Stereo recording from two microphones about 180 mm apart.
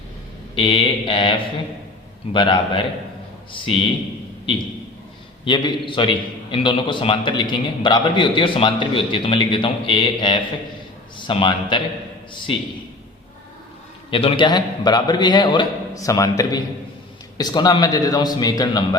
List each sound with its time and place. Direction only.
0.5 s a man's voice: 30° left (ahead or behind)
5.5 s a man's voice: 25° left (ahead or behind)
14.1 s a man's voice: 30° left (ahead or behind)